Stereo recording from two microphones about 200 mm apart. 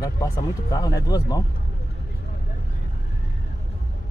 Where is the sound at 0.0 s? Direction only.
20° left (ahead or behind).